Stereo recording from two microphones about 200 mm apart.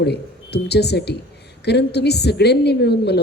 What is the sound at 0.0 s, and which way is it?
A woman's voice, 55° left (ahead or behind).